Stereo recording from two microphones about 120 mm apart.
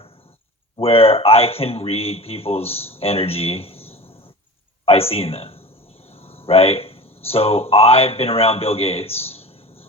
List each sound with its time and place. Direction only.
0.8 s a man's voice: 55° left (ahead or behind)